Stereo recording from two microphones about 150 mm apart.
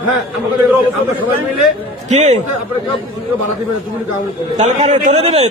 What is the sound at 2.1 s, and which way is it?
Speech, 50° right (ahead or behind).